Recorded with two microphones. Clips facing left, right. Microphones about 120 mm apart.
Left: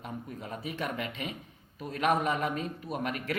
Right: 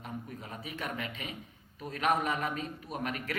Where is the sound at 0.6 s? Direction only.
35° left (ahead or behind).